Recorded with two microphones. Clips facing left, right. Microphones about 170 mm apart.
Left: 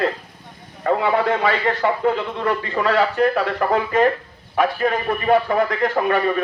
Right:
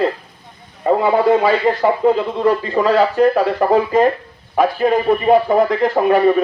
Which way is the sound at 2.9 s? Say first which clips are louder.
Right 4 dB; 35° right (ahead or behind).